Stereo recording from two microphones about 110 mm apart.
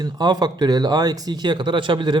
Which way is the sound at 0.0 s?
40° right (ahead or behind).